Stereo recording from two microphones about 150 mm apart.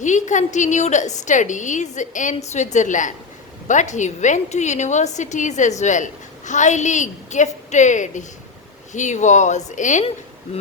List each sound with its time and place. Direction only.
0.0 s a woman's voice: 55° left (ahead or behind)